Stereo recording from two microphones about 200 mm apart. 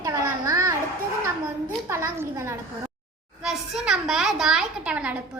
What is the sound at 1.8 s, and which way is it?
A woman's voice, 10° right (ahead or behind).